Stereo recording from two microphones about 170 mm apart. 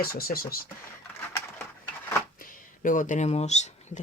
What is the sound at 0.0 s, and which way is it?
Speech, 60° left (ahead or behind).